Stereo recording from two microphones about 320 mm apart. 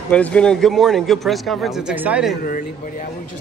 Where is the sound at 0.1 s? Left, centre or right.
Centre.